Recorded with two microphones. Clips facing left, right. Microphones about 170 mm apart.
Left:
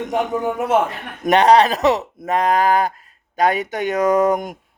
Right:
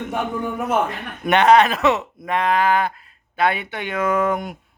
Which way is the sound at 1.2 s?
35° left (ahead or behind).